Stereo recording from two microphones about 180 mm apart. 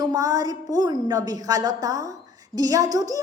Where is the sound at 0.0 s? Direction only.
20° right (ahead or behind).